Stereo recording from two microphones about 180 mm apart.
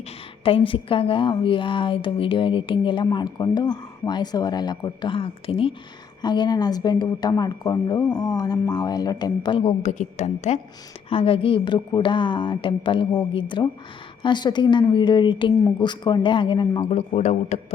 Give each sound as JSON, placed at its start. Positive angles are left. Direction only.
{"t": 0.4, "sound": "a woman's voice", "side_deg": 30}
{"t": 16.9, "sound": "speech", "side_deg": 40}